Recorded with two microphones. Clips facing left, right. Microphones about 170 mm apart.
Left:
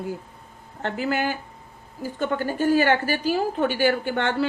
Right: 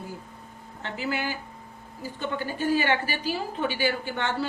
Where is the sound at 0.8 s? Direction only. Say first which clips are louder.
Left 6 dB; 50° left (ahead or behind).